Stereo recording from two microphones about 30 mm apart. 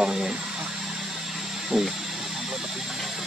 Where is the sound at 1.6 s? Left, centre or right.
Centre.